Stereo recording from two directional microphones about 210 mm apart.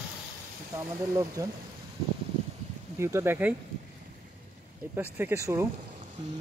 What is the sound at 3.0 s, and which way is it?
Speech, 15° right (ahead or behind).